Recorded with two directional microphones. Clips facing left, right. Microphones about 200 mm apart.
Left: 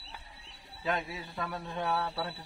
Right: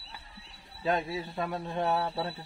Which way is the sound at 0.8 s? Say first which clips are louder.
Right 4 dB; 30° right (ahead or behind).